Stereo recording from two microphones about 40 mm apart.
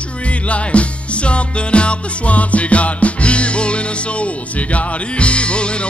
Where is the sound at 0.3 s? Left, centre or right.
Left.